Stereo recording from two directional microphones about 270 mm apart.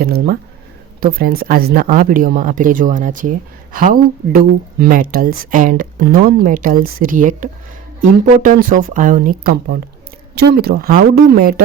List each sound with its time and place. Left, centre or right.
0.0 s speech: right